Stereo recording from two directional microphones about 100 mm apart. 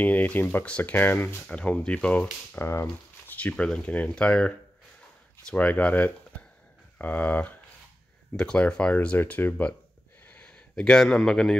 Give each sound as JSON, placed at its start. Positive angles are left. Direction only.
{"t": 0.0, "sound": "speech", "side_deg": 15}
{"t": 2.5, "sound": "crumpling", "side_deg": 25}
{"t": 3.3, "sound": "speech", "side_deg": 15}
{"t": 10.2, "sound": "a sound", "side_deg": 15}